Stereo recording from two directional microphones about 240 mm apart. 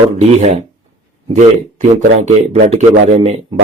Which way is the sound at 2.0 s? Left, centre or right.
Right.